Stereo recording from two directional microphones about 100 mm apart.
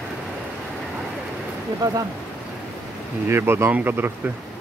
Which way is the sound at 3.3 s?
25° right (ahead or behind).